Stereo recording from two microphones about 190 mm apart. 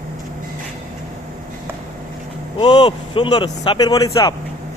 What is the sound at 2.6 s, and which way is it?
Speech, 25° left (ahead or behind).